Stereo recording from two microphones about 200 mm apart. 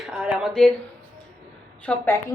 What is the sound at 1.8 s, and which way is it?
Speech, 10° left (ahead or behind).